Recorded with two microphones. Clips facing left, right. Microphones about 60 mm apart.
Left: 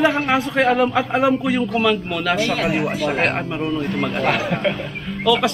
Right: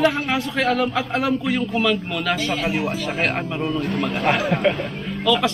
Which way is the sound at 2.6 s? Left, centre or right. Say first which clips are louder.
Left 2 dB; left.